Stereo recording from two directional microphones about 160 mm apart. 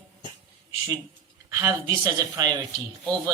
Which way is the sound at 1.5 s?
20° right (ahead or behind).